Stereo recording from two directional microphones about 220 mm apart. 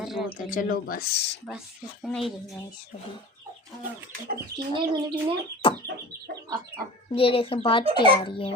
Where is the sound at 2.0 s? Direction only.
Centre (ahead or behind).